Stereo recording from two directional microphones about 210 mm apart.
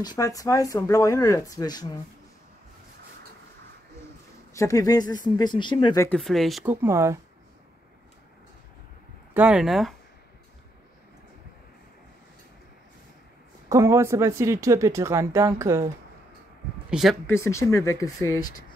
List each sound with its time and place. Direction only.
0.0 s speech: 20° left (ahead or behind)
4.6 s speech: 15° left (ahead or behind)
6.0 s speech: centre (ahead or behind)
9.3 s speech: 5° right (ahead or behind)
13.7 s speech: 15° right (ahead or behind)
16.9 s speech: centre (ahead or behind)
17.3 s speech: 15° left (ahead or behind)